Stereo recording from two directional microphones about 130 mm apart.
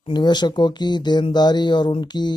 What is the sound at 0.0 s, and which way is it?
Speech, 35° left (ahead or behind).